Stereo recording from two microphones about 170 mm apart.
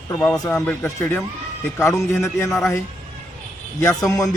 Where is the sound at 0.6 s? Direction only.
10° left (ahead or behind).